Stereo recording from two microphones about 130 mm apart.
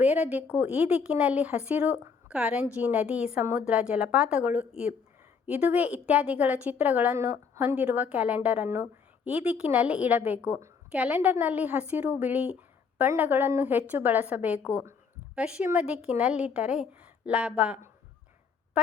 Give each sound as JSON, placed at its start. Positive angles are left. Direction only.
{"t": 0.0, "sound": "a woman's voice", "side_deg": -10}
{"t": 7.1, "sound": "a woman's voice", "side_deg": -20}
{"t": 7.8, "sound": "a woman's voice", "side_deg": -10}